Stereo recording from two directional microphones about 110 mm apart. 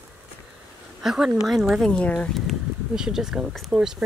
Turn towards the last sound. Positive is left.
turn(degrees=-5)  # may be behind; listen again after turning